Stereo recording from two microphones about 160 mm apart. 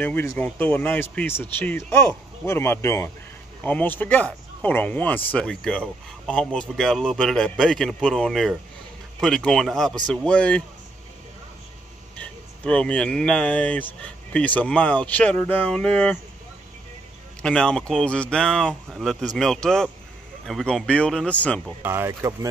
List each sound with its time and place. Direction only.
0.0 s speech: 15° left (ahead or behind)
12.2 s speech: 5° left (ahead or behind)
17.4 s speech: 5° left (ahead or behind)
21.8 s speech: 15° right (ahead or behind)